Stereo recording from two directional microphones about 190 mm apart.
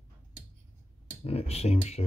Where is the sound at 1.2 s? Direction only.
30° left (ahead or behind).